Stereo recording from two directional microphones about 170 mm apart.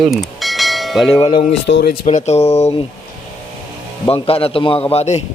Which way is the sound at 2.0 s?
40° left (ahead or behind).